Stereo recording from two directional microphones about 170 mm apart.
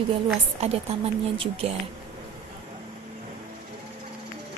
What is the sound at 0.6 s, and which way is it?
Speech, 40° right (ahead or behind).